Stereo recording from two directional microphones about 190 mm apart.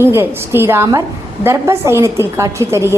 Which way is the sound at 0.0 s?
10° right (ahead or behind).